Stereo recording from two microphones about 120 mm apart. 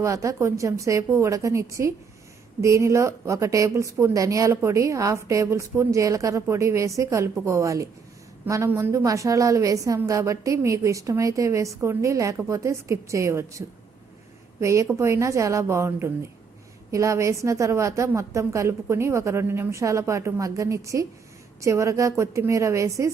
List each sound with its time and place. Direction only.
0.0 s a woman's voice: 25° right (ahead or behind)